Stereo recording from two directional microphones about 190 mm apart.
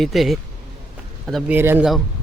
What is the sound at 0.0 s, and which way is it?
Speech, centre (ahead or behind).